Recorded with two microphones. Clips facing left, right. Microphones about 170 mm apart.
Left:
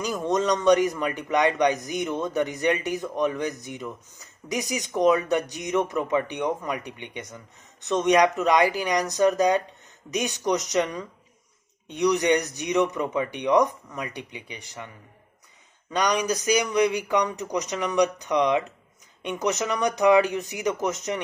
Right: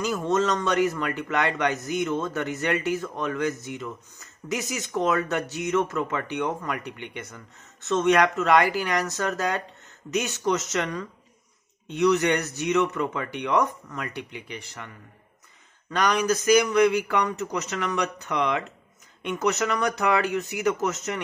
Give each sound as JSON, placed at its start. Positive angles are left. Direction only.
{"t": 0.0, "sound": "speech", "side_deg": 15}
{"t": 16.1, "sound": "speech", "side_deg": 15}